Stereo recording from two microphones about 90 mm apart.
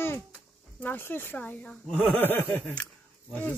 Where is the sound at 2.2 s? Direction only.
20° left (ahead or behind).